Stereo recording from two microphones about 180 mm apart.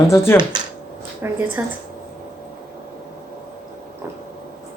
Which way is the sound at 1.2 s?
15° right (ahead or behind).